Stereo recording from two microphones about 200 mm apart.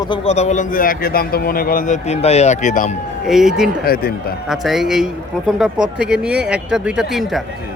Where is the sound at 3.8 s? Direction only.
50° left (ahead or behind).